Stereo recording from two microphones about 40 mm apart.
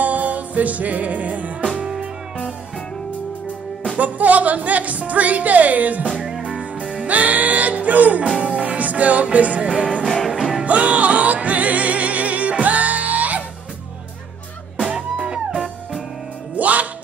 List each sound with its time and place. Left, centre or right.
0.0 s music: right
3.9 s music: right
14.8 s music: right
16.5 s music: right